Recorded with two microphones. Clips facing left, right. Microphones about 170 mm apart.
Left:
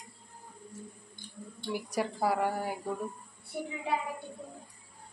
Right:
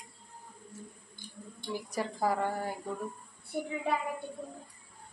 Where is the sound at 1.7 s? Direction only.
10° left (ahead or behind).